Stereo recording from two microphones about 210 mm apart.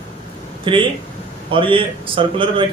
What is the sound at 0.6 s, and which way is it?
Speech, 25° right (ahead or behind).